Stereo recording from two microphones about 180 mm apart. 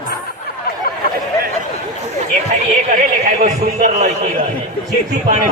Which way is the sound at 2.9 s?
40° right (ahead or behind).